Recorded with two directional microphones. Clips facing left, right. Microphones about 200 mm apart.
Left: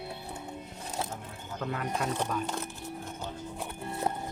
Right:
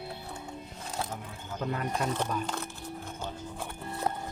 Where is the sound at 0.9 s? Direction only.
20° left (ahead or behind).